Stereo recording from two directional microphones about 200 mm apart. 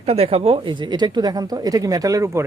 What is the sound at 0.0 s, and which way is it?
Speech, 30° right (ahead or behind).